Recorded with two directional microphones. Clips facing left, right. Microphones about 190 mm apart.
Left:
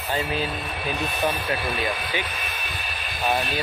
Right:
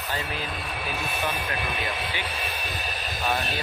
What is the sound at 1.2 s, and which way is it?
Speech, 20° left (ahead or behind).